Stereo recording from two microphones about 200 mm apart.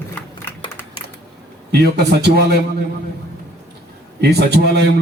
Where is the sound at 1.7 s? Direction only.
55° right (ahead or behind).